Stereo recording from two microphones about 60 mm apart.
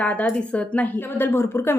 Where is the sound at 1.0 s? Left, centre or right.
Left.